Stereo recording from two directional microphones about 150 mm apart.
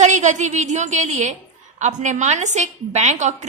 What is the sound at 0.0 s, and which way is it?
A woman's voice, 55° right (ahead or behind).